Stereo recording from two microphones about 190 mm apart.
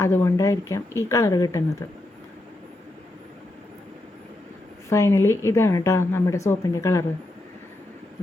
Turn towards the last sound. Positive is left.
turn(degrees=15)  # may be behind; listen again after turning